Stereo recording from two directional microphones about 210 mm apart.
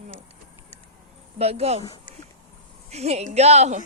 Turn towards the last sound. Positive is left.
turn(degrees=-30)  # may be behind; listen again after turning